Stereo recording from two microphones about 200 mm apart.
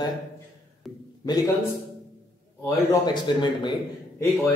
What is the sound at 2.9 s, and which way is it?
Speech, 20° left (ahead or behind).